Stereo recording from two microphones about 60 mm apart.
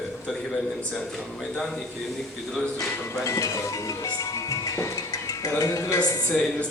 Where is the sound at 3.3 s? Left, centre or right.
Left.